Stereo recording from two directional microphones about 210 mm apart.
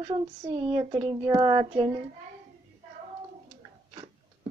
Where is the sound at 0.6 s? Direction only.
25° right (ahead or behind).